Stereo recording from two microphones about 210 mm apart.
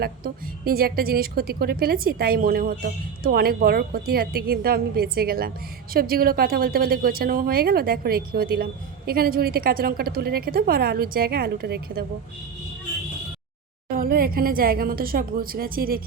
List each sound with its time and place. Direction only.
0.0 s a woman's voice: 45° right (ahead or behind)
13.9 s a woman's voice: 45° right (ahead or behind)